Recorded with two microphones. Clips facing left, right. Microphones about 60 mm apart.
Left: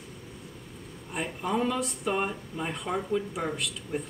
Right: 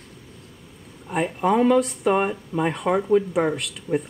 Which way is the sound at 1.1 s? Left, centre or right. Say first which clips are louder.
Right 9 dB; right.